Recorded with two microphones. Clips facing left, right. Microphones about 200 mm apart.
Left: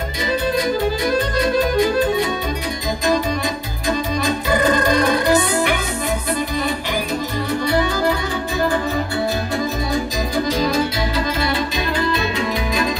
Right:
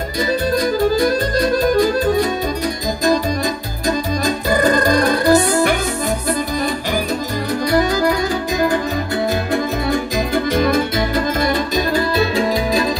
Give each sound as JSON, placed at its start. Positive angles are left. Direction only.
{"t": 0.6, "sound": "music", "side_deg": -40}
{"t": 4.2, "sound": "music", "side_deg": -40}
{"t": 7.6, "sound": "music", "side_deg": -40}
{"t": 9.5, "sound": "music", "side_deg": -55}